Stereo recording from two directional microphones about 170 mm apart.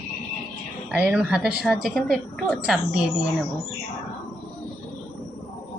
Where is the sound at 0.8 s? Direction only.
10° right (ahead or behind).